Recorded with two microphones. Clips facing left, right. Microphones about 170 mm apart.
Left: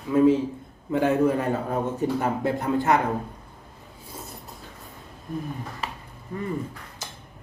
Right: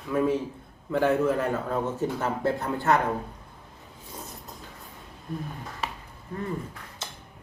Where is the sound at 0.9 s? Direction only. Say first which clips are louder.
Left 2 dB; 15° left (ahead or behind).